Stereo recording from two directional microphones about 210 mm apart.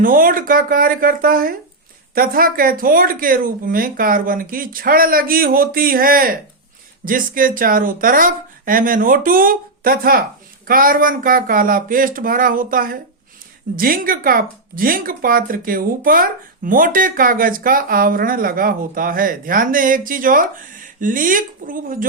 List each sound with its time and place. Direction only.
0.0 s speech: 40° right (ahead or behind)